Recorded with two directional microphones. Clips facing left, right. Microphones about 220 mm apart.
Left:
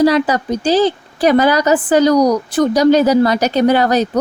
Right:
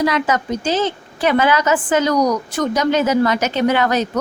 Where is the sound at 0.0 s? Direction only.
35° left (ahead or behind).